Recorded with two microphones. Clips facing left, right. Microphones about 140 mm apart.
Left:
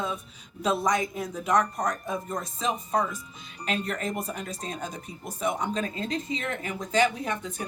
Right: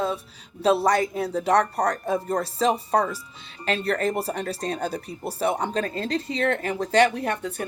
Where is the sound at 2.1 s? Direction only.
70° right (ahead or behind).